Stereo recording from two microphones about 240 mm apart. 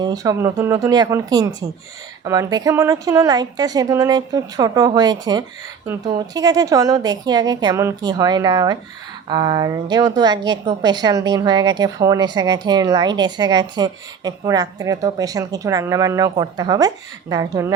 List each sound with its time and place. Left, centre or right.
0.0 s a woman's voice: centre